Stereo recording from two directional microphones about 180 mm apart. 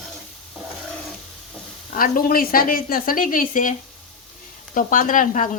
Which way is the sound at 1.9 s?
50° left (ahead or behind).